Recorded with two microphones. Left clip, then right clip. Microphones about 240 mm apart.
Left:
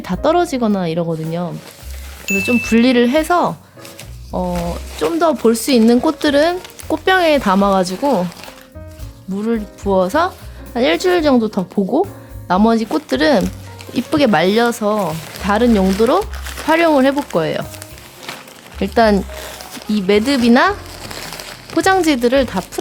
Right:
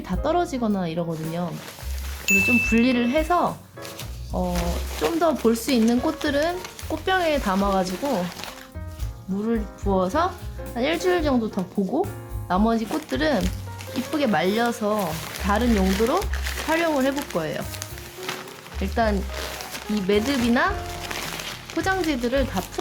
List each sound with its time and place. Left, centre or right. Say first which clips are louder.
0.0 s speech: left 9 dB; left
2.5 s speech: left 6 dB; left
9.4 s speech: left 6 dB; left
18.8 s speech: left 11 dB; left
21.8 s speech: left 11 dB; left